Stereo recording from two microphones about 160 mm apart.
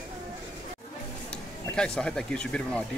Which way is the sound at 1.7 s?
5° left (ahead or behind).